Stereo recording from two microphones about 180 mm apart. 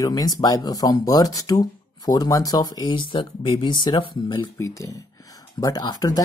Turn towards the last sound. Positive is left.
turn(degrees=20)  # may be behind; listen again after turning